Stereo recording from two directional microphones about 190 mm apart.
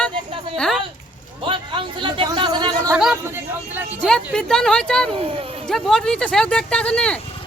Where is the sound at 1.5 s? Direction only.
25° right (ahead or behind).